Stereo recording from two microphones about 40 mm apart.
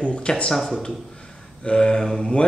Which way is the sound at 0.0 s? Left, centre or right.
Left.